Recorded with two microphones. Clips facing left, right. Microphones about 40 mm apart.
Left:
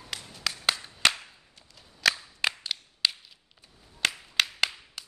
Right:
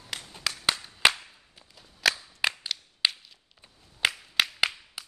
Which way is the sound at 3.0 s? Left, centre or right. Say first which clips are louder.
Right 1 dB; centre.